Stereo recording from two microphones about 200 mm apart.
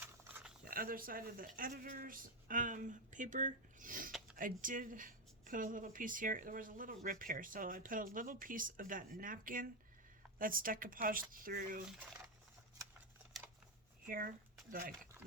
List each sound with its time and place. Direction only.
0.6 s speech: 45° right (ahead or behind)
14.1 s speech: 45° right (ahead or behind)